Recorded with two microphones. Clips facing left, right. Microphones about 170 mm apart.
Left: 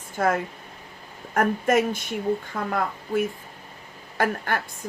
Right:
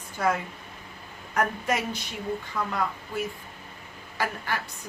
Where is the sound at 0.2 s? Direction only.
50° left (ahead or behind).